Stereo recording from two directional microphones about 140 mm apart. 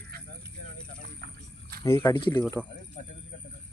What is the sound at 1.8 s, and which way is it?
Speech, 20° left (ahead or behind).